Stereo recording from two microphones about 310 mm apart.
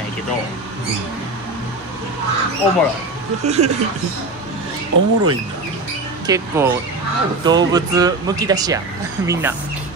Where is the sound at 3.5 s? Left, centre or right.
Right.